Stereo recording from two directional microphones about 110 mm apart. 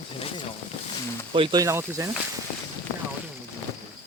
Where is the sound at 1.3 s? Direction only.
55° right (ahead or behind).